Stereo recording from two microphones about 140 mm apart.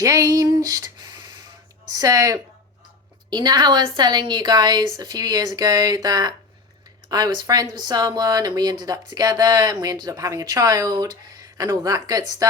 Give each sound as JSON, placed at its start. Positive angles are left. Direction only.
{"t": 0.0, "sound": "speech", "side_deg": -25}